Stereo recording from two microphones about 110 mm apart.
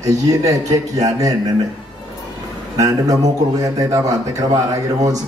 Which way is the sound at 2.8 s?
30° right (ahead or behind).